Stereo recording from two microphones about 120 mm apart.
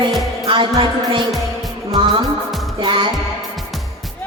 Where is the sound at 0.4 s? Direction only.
45° right (ahead or behind).